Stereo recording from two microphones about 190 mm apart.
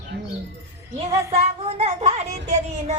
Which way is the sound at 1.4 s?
35° right (ahead or behind).